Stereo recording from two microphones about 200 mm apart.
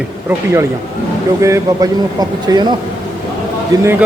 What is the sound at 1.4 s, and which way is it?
Speech, 15° right (ahead or behind).